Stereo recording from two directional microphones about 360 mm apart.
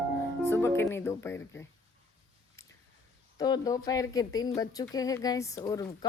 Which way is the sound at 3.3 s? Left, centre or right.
Centre.